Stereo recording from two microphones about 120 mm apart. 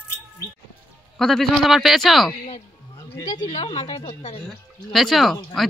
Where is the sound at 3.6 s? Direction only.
50° left (ahead or behind).